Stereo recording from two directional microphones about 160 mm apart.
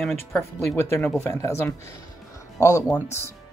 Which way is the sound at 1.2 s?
20° left (ahead or behind).